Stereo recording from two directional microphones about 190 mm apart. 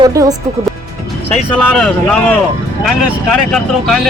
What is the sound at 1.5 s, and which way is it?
Speech, 5° left (ahead or behind).